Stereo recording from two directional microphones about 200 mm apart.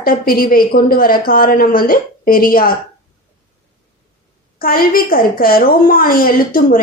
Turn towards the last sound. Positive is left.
turn(degrees=45)  # may be behind; listen again after turning